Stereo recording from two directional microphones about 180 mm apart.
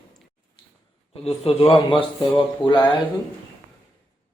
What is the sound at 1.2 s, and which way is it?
Speech, 30° left (ahead or behind).